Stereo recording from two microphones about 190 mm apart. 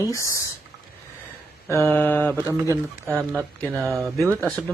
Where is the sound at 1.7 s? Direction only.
10° left (ahead or behind).